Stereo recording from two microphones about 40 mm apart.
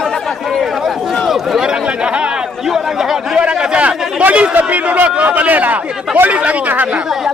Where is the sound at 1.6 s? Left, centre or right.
Right.